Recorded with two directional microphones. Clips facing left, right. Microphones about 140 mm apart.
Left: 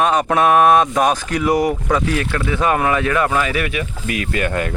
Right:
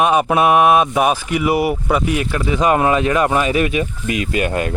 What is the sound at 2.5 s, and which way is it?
Speech, 20° right (ahead or behind).